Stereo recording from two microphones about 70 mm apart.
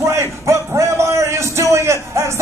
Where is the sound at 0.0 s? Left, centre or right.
Right.